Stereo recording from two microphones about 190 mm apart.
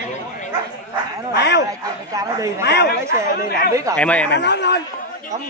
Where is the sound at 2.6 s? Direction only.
60° left (ahead or behind).